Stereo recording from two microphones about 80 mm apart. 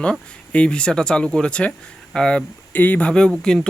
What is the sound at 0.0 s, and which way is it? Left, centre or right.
Speech, centre.